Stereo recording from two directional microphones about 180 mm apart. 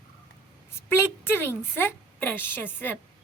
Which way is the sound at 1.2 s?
10° left (ahead or behind).